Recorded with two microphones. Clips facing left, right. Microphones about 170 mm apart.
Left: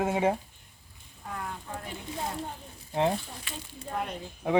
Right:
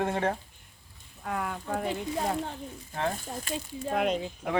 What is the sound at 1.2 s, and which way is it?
Speech, 75° right (ahead or behind).